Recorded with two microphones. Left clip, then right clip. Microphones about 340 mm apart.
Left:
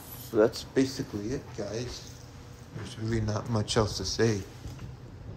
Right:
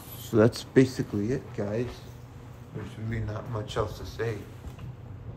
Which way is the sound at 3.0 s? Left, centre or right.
Centre.